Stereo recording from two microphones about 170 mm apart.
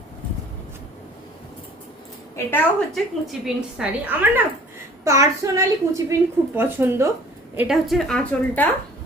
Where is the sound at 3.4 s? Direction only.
5° right (ahead or behind).